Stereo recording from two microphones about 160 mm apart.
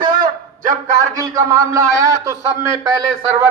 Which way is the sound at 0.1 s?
55° right (ahead or behind).